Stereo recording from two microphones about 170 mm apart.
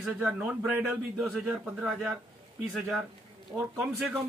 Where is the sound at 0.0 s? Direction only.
5° right (ahead or behind).